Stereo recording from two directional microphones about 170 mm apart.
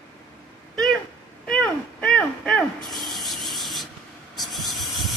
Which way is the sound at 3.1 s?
Centre (ahead or behind).